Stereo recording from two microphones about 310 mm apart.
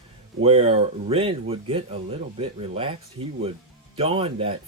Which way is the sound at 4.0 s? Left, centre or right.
Centre.